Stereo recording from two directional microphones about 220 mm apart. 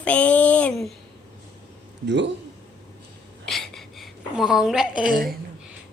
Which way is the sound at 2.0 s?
55° right (ahead or behind).